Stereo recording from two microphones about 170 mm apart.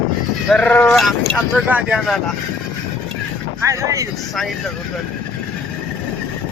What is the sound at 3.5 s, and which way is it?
Speech, 15° right (ahead or behind).